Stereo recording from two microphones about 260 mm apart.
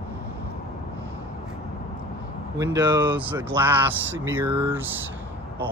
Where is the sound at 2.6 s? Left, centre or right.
Centre.